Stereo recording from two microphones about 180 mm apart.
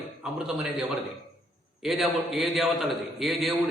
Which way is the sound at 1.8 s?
Centre (ahead or behind).